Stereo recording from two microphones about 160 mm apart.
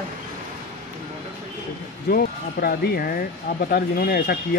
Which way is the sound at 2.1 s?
70° left (ahead or behind).